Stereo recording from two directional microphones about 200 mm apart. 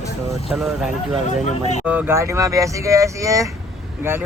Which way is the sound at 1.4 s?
35° left (ahead or behind).